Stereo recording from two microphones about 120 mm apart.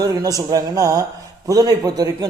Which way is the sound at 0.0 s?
30° right (ahead or behind).